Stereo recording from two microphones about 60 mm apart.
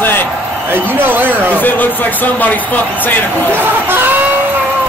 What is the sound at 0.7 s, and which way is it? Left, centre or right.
Speech, right.